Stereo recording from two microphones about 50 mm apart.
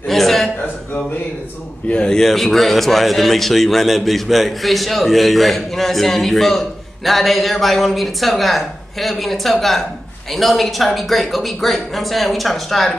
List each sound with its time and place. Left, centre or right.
0.1 s a sound: centre
1.9 s a man's voice: left
2.1 s a man's voice: centre